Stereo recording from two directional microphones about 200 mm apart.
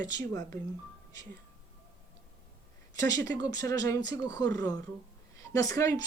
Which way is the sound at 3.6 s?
15° left (ahead or behind).